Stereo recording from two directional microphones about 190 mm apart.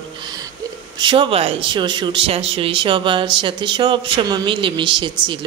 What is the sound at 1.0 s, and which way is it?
Speech, 25° right (ahead or behind).